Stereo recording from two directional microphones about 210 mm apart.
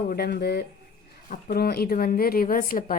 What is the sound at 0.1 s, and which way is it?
A woman's voice, 50° left (ahead or behind).